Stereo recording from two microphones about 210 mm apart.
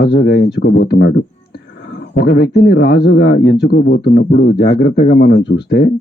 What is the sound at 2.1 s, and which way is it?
A man's voice, 50° left (ahead or behind).